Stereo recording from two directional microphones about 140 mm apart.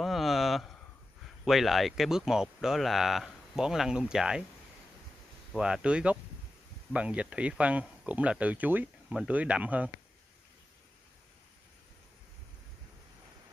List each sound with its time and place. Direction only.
0.0 s a sound: centre (ahead or behind)
1.4 s speech: centre (ahead or behind)
5.5 s speech: 5° right (ahead or behind)